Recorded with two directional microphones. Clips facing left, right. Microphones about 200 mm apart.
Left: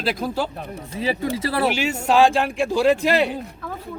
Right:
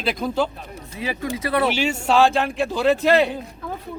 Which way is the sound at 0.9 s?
30° left (ahead or behind).